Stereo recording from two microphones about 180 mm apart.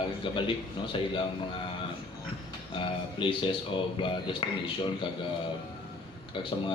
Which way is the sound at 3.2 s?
30° left (ahead or behind).